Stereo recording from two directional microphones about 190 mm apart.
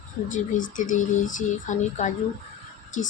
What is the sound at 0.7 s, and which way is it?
Speech, 45° left (ahead or behind).